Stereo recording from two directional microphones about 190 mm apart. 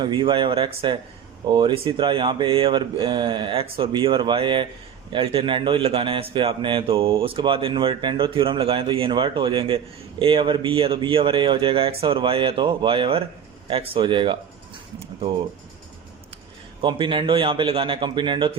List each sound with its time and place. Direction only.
0.0 s a man's voice: 25° right (ahead or behind)
16.8 s a man's voice: 25° right (ahead or behind)